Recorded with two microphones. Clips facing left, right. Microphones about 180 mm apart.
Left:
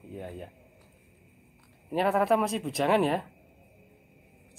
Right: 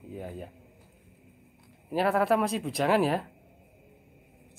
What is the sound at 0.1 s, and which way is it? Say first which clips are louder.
Speech: right 1 dB; centre (ahead or behind).